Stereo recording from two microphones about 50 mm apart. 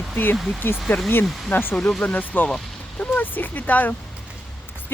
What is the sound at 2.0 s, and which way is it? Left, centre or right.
Speech, left.